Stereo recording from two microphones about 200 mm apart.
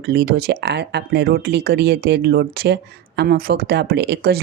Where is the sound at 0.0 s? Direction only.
50° right (ahead or behind).